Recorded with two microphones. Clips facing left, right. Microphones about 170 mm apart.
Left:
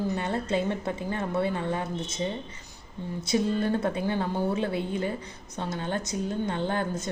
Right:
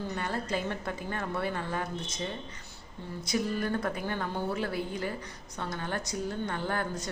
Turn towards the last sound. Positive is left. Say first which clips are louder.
# left 4 dB
turn(degrees=25)  # may be behind; listen again after turning